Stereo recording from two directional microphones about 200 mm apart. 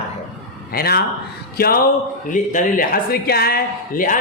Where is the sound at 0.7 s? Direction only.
50° left (ahead or behind).